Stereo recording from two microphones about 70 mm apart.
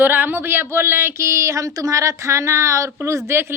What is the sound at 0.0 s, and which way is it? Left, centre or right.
A woman's voice, right.